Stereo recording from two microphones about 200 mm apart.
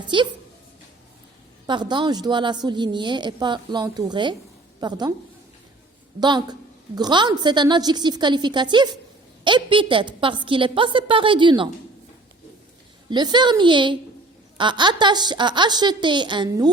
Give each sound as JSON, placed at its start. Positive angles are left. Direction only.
{"t": 0.1, "sound": "a woman's voice", "side_deg": -25}
{"t": 1.6, "sound": "a woman's voice", "side_deg": -20}
{"t": 6.1, "sound": "a woman's voice", "side_deg": -20}
{"t": 13.1, "sound": "a woman's voice", "side_deg": -20}